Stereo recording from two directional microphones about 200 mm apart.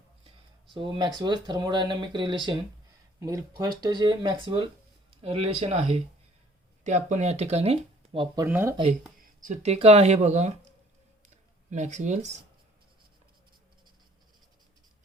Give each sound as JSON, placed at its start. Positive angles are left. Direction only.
{"t": 0.3, "sound": "speech", "side_deg": -25}
{"t": 8.4, "sound": "speech", "side_deg": -10}
{"t": 8.7, "sound": "speech", "side_deg": -35}
{"t": 11.7, "sound": "speech", "side_deg": -35}